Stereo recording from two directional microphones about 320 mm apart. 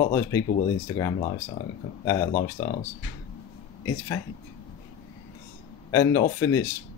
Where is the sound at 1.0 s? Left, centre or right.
Centre.